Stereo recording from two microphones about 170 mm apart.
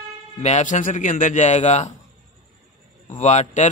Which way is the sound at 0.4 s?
40° left (ahead or behind).